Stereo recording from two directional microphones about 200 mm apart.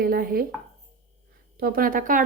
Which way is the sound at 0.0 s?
45° right (ahead or behind).